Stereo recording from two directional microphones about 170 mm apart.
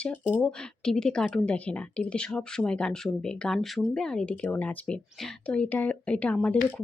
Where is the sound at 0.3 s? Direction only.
5° left (ahead or behind).